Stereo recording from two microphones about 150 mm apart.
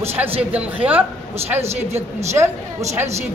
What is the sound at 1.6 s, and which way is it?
Speech, 45° right (ahead or behind).